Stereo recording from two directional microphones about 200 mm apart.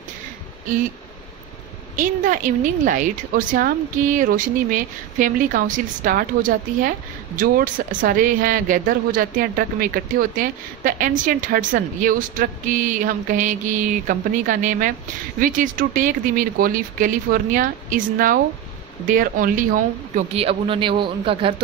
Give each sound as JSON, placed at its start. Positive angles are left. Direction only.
{"t": 2.0, "sound": "a woman's voice", "side_deg": -40}
{"t": 20.2, "sound": "a man's voice", "side_deg": -30}